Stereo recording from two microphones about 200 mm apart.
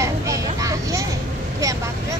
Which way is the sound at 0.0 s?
15° right (ahead or behind).